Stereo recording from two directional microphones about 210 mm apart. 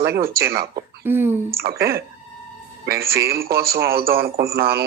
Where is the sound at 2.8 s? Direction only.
50° right (ahead or behind).